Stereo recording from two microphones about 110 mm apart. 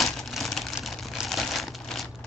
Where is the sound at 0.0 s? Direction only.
Centre (ahead or behind).